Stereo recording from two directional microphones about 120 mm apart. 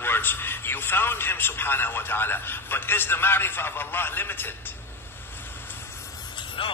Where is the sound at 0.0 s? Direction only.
20° left (ahead or behind).